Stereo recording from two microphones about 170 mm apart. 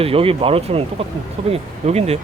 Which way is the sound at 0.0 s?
35° right (ahead or behind).